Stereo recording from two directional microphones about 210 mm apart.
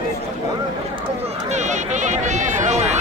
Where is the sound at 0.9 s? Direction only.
30° right (ahead or behind).